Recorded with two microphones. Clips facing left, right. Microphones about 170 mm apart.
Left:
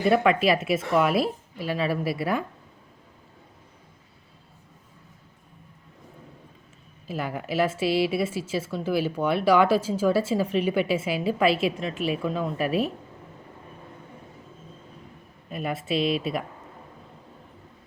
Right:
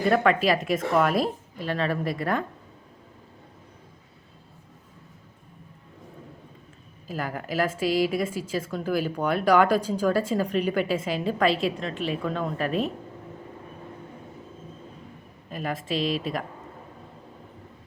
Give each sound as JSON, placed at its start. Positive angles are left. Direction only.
{"t": 0.0, "sound": "a woman's voice", "side_deg": 10}
{"t": 7.1, "sound": "a woman's voice", "side_deg": 10}
{"t": 7.9, "sound": "a woman's voice", "side_deg": -40}
{"t": 8.1, "sound": "a woman's voice", "side_deg": 10}
{"t": 15.4, "sound": "a woman's voice", "side_deg": 5}
{"t": 16.0, "sound": "a woman's voice", "side_deg": -40}